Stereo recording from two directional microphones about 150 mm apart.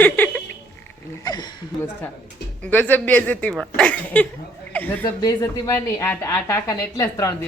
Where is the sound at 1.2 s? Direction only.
25° left (ahead or behind).